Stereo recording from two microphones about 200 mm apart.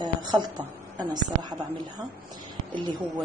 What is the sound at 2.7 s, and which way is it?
Speech, 20° right (ahead or behind).